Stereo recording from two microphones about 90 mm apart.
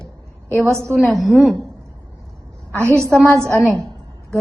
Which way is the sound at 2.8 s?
30° right (ahead or behind).